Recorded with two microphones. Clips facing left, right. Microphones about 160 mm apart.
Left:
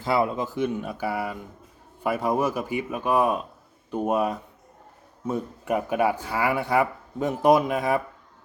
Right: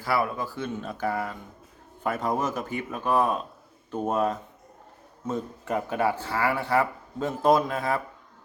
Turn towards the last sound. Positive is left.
turn(degrees=15)  # may be behind; listen again after turning